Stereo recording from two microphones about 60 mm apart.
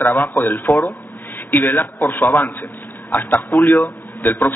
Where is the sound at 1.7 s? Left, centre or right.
Left.